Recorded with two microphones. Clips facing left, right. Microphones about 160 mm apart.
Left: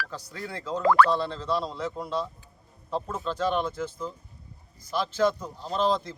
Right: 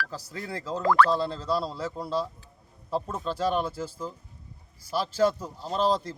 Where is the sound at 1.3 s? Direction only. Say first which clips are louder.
Even; 35° right (ahead or behind).